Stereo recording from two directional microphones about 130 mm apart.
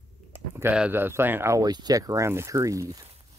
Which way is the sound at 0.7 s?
15° right (ahead or behind).